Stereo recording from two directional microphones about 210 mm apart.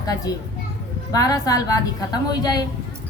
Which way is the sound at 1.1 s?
15° left (ahead or behind).